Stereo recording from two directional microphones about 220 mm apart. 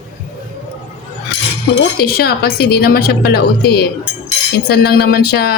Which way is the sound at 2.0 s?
45° left (ahead or behind).